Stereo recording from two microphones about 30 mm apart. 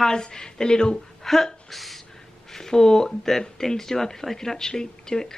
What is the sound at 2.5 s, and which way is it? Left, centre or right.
A woman's voice, centre.